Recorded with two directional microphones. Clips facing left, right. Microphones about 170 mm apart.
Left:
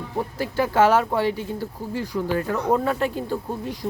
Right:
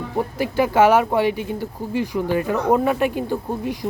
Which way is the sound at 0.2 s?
15° right (ahead or behind).